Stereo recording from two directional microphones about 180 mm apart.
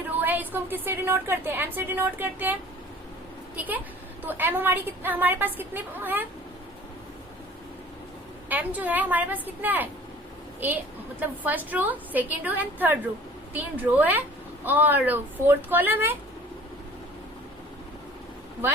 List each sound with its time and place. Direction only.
0.2 s speech: 10° right (ahead or behind)
8.4 s speech: 10° right (ahead or behind)
11.2 s speech: 10° right (ahead or behind)